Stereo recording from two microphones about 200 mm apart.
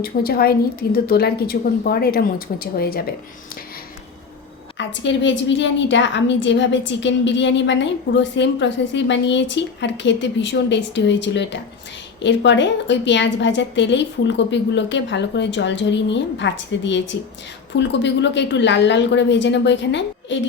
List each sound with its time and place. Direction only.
0.0 s a woman's voice: 50° left (ahead or behind)
4.8 s a woman's voice: 65° left (ahead or behind)